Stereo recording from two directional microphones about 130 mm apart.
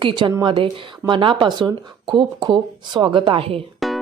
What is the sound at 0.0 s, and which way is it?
A woman's voice, 40° right (ahead or behind).